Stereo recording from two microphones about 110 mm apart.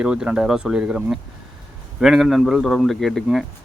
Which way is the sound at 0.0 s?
10° right (ahead or behind).